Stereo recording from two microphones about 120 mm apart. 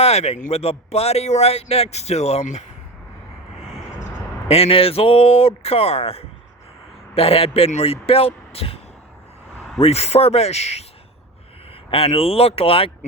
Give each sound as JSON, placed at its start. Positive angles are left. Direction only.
{"t": 0.0, "sound": "a man's voice", "side_deg": 60}
{"t": 0.6, "sound": "speech", "side_deg": 55}
{"t": 4.0, "sound": "speech", "side_deg": 55}
{"t": 11.9, "sound": "speech", "side_deg": 50}